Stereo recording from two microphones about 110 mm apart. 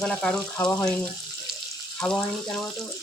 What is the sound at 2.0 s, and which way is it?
Speech, 5° left (ahead or behind).